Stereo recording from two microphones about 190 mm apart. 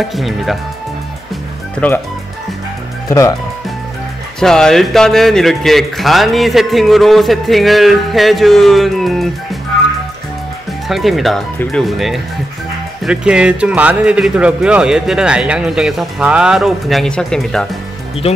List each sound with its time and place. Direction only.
0.0 s a man's voice: centre (ahead or behind)
3.1 s speech: 15° left (ahead or behind)
4.4 s a man's voice: centre (ahead or behind)
10.9 s a man's voice: centre (ahead or behind)